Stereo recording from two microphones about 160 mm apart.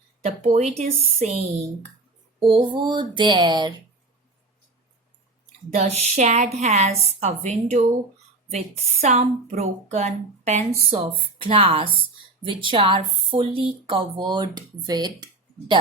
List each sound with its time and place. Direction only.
0.2 s a woman's voice: 40° right (ahead or behind)
2.4 s a sound: 35° right (ahead or behind)
5.7 s a woman's voice: 45° right (ahead or behind)
10.8 s a woman's voice: 35° right (ahead or behind)